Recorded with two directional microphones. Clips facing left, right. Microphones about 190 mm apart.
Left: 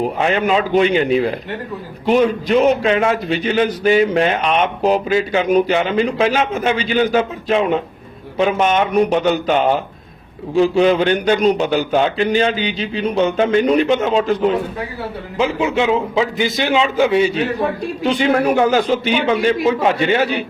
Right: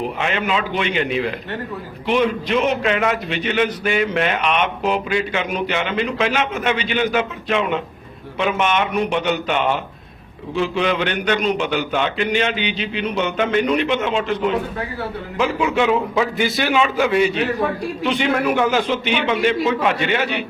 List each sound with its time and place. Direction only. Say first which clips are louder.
0.0 s a man's voice: left 5 dB; 40° left (ahead or behind)